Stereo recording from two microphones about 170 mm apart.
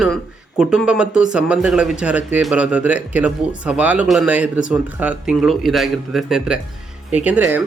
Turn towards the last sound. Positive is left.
turn(degrees=-10)  # may be behind; listen again after turning